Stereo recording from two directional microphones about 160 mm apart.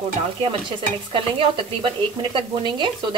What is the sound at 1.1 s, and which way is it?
Speech, 35° right (ahead or behind).